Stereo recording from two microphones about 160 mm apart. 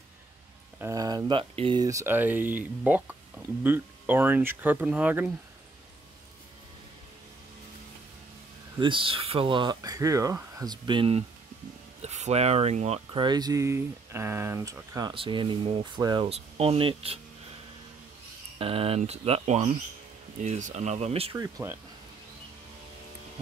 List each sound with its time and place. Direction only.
0.7 s speech: 20° right (ahead or behind)
1.5 s speech: 35° right (ahead or behind)
1.8 s speech: 20° right (ahead or behind)
8.7 s speech: 30° right (ahead or behind)
16.3 s speech: 40° right (ahead or behind)
18.6 s speech: 35° right (ahead or behind)
21.4 s speech: 25° right (ahead or behind)